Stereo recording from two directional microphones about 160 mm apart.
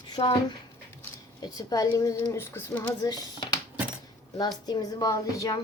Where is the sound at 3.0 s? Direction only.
25° left (ahead or behind).